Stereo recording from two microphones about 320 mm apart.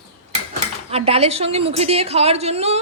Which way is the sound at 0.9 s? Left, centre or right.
Centre.